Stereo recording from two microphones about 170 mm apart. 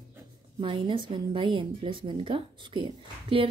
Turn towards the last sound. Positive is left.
turn(degrees=-30)  # may be behind; listen again after turning